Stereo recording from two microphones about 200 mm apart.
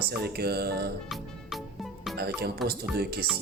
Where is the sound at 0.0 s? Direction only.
50° right (ahead or behind).